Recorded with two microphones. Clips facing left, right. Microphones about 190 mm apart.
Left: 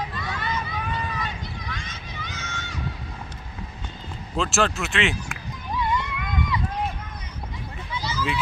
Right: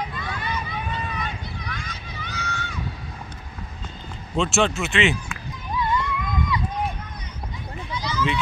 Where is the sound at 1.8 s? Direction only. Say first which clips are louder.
Right 1 dB; 20° left (ahead or behind).